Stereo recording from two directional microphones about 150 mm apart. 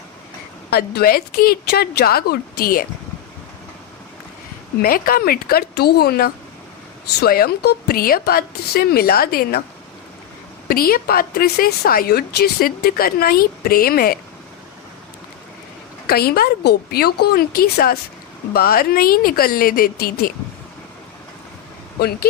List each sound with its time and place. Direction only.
0.7 s a woman's voice: 85° left
4.8 s a woman's voice: 75° left (ahead or behind)
10.7 s speech: 80° left
16.0 s a woman's voice: 90° left